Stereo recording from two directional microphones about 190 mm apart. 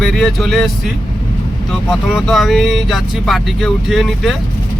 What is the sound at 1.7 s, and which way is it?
Speech, centre (ahead or behind).